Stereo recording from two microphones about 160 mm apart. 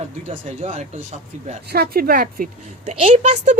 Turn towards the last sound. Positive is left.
turn(degrees=-45)  # may be behind; listen again after turning